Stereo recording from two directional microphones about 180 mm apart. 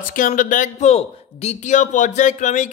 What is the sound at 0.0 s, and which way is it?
A man's voice, 45° left (ahead or behind).